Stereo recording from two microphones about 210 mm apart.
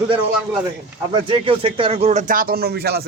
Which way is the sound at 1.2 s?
25° right (ahead or behind).